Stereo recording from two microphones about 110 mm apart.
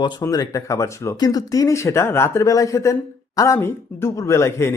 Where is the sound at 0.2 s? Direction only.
30° left (ahead or behind).